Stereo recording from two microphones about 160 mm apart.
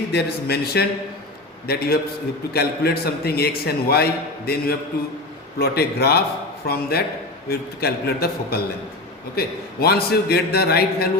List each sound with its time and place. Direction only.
0.1 s a man's voice: 90° left